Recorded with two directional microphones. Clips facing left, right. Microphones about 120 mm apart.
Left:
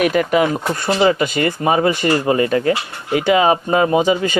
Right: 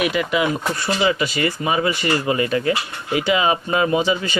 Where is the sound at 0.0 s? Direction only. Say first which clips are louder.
Left 5 dB; 45° left (ahead or behind).